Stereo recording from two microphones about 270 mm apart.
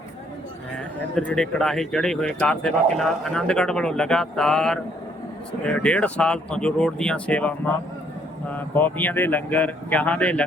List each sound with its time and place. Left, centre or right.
1.1 s speech: centre